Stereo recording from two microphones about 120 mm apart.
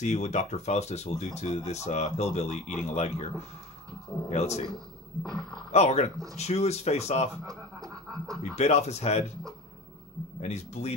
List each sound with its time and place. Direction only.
0.0 s speech: 75° left (ahead or behind)
4.3 s speech: 65° left (ahead or behind)
5.2 s speech: 5° left (ahead or behind)
5.7 s speech: 65° left (ahead or behind)
7.4 s a sound: 30° right (ahead or behind)
8.5 s speech: 65° left (ahead or behind)
10.4 s speech: 65° left (ahead or behind)